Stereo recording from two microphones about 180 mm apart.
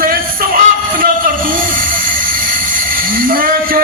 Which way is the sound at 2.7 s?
50° right (ahead or behind).